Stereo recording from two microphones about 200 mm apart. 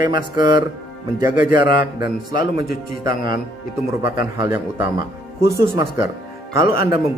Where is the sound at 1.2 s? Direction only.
45° left (ahead or behind).